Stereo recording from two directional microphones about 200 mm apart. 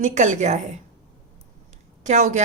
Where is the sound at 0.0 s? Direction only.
40° right (ahead or behind).